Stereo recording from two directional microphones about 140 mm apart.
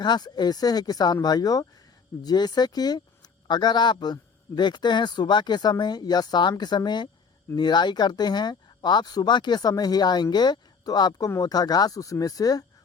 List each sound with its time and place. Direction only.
0.0 s speech: 30° left (ahead or behind)